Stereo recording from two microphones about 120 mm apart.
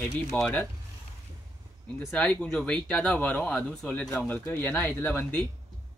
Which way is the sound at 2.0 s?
5° left (ahead or behind).